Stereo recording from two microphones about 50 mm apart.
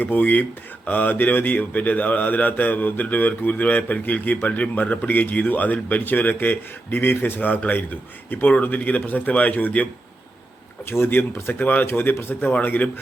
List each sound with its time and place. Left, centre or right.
0.0 s a man's voice: left
10.8 s speech: left
11.4 s a man's voice: left